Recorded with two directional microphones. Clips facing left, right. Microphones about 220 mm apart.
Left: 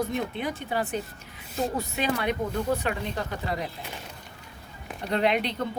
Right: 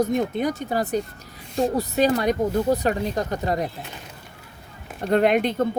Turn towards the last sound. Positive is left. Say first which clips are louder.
# right 6 dB
turn(degrees=-45)  # may be behind; listen again after turning